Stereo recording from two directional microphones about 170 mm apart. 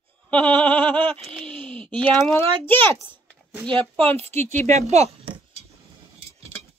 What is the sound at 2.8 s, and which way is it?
Speech, 10° left (ahead or behind).